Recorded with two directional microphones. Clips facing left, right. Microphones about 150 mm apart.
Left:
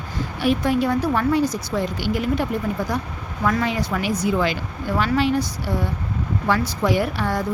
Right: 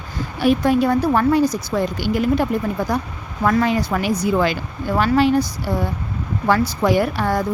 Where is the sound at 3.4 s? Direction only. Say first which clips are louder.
Right 4 dB; 45° right (ahead or behind).